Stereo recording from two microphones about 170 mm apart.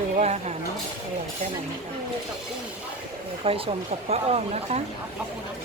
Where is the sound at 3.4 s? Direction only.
35° right (ahead or behind).